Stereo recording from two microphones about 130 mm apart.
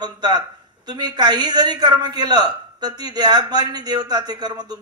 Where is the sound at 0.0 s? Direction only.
30° right (ahead or behind).